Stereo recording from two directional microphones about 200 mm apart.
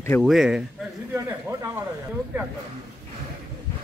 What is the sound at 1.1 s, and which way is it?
Speech, 15° right (ahead or behind).